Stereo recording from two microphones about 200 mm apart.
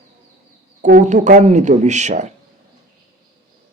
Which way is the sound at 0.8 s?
40° right (ahead or behind).